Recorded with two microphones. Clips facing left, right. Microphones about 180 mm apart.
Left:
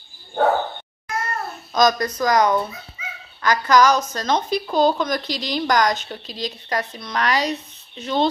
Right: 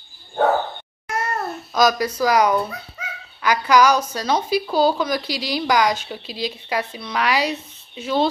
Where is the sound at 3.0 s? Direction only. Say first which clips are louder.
Right 1 dB; 80° right.